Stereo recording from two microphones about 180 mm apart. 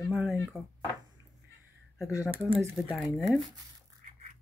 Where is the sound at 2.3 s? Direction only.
30° right (ahead or behind).